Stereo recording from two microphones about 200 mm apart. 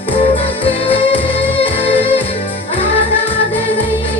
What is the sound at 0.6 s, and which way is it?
Music, 30° left (ahead or behind).